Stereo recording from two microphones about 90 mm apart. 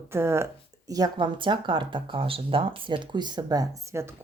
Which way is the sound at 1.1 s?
60° right (ahead or behind).